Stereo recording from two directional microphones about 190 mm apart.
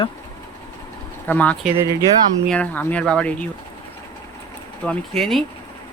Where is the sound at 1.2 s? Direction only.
10° left (ahead or behind).